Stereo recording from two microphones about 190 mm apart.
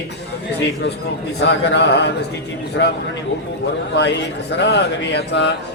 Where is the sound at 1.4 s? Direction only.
65° left (ahead or behind).